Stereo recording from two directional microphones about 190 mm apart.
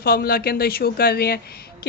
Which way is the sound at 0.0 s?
50° left (ahead or behind).